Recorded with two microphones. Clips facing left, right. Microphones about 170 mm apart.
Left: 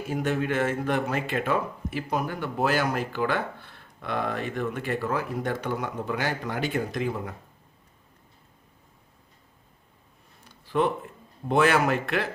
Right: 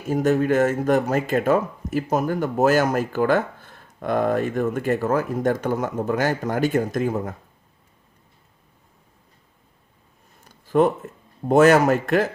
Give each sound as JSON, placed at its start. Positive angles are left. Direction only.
{"t": 0.1, "sound": "speech", "side_deg": -40}
{"t": 10.4, "sound": "speech", "side_deg": -45}